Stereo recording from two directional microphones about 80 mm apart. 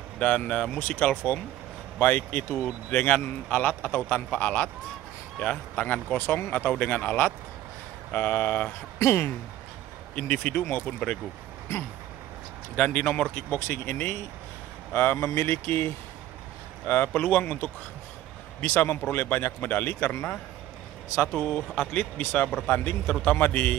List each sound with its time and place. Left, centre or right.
0.2 s a man's voice: centre
2.6 s a man's voice: centre
6.7 s a man's voice: centre
8.1 s a man's voice: left
10.1 s a man's voice: centre
12.7 s a man's voice: centre
13.5 s a man's voice: left
21.3 s a man's voice: centre